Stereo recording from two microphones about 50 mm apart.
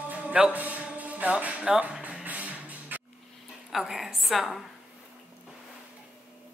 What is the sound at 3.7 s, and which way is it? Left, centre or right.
Speech, centre.